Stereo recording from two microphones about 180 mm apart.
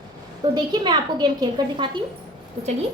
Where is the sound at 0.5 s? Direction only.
25° right (ahead or behind).